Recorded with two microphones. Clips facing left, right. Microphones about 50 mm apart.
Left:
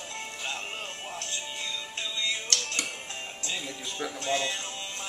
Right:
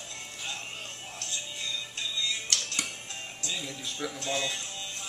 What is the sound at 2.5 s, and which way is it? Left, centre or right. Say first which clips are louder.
Music: left 2 dB; centre.